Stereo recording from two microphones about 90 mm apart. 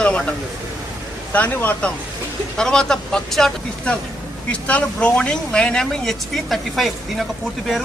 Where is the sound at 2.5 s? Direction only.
10° left (ahead or behind).